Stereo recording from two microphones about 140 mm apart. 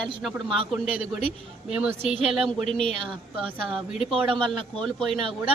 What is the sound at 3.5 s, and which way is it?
A woman's voice, centre (ahead or behind).